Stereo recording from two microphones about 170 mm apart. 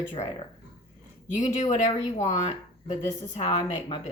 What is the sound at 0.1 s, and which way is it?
Speech, 30° left (ahead or behind).